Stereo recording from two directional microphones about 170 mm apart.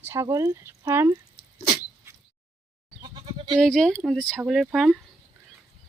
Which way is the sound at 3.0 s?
30° right (ahead or behind).